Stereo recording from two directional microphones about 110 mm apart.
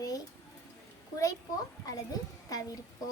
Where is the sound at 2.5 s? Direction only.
30° left (ahead or behind).